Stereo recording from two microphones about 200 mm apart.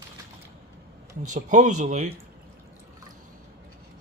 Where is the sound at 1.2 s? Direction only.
40° right (ahead or behind).